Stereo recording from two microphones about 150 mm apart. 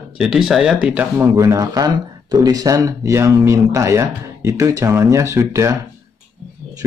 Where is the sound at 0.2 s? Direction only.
5° right (ahead or behind).